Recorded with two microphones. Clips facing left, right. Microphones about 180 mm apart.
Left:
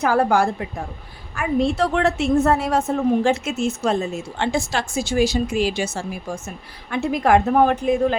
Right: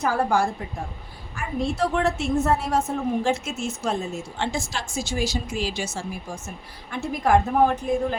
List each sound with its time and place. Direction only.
0.0 s a woman's voice: 70° left (ahead or behind)
6.9 s a woman's voice: 75° left (ahead or behind)